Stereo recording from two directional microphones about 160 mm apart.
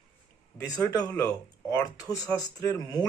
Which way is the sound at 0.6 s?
20° left (ahead or behind).